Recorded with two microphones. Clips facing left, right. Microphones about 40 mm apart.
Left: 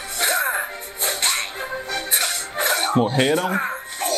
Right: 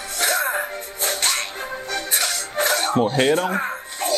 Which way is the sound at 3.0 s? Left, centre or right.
Centre.